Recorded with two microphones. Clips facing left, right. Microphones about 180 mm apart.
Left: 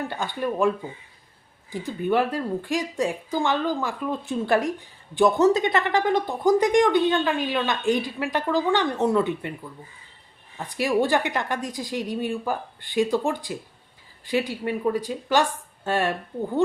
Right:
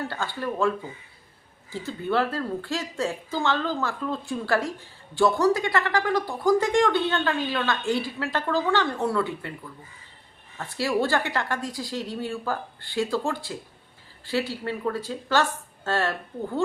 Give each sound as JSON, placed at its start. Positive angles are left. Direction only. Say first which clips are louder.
{"t": 0.0, "sound": "a woman's voice", "louder": "left 2 dB", "side_deg": 15}
{"t": 1.7, "sound": "a woman's voice", "louder": "left 3 dB", "side_deg": 15}
{"t": 10.6, "sound": "a woman's voice", "louder": "left 2 dB", "side_deg": 15}